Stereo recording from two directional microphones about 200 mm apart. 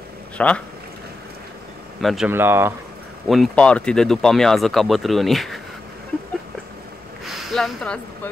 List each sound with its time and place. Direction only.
0.4 s speech: 5° left (ahead or behind)
2.0 s speech: centre (ahead or behind)
3.3 s speech: 5° left (ahead or behind)
7.2 s a sound: centre (ahead or behind)